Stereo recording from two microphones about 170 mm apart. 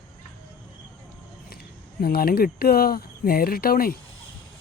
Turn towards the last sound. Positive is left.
turn(degrees=60)  # may be behind; listen again after turning